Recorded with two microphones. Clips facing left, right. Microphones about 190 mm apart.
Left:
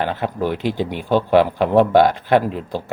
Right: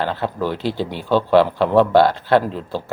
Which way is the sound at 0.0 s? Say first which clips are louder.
Left 1 dB; 15° left (ahead or behind).